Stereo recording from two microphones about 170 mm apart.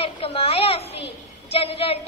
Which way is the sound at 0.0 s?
35° left (ahead or behind).